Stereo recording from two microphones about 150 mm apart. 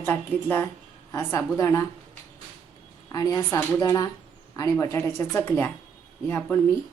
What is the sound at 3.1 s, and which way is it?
A woman's voice, 25° left (ahead or behind).